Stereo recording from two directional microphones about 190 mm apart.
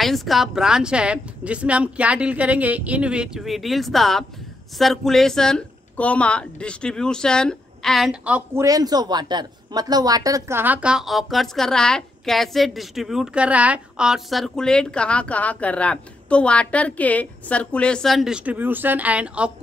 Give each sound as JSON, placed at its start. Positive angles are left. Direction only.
{"t": 0.0, "sound": "speech", "side_deg": 0}